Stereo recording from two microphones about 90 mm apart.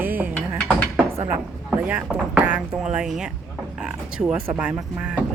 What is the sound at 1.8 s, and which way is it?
Speech, 15° right (ahead or behind).